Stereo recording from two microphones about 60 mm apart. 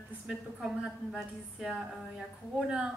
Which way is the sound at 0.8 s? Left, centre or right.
Centre.